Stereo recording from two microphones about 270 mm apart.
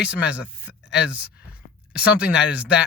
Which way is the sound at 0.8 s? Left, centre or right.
Left.